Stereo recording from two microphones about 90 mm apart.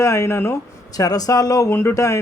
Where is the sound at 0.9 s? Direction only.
45° left (ahead or behind).